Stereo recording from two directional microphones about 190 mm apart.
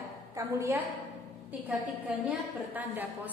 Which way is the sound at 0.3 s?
15° right (ahead or behind).